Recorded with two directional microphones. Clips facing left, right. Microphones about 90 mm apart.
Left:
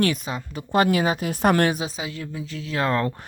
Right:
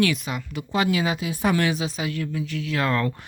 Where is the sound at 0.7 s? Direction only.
45° left (ahead or behind).